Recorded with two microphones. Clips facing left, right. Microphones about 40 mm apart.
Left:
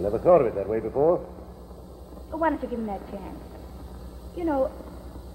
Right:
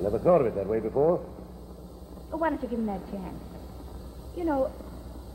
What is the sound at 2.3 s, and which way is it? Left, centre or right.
Speech, centre.